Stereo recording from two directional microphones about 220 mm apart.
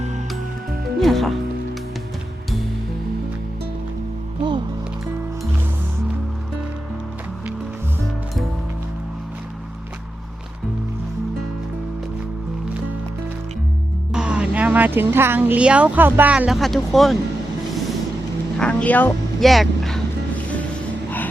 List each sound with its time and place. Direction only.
0.9 s music: centre (ahead or behind)
14.1 s speech: 5° right (ahead or behind)
18.6 s speech: 5° left (ahead or behind)